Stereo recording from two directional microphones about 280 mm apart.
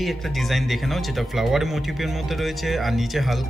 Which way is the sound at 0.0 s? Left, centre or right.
Centre.